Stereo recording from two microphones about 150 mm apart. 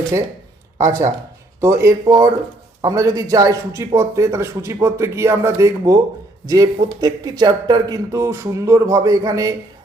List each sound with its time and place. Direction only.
0.8 s a man's voice: 20° right (ahead or behind)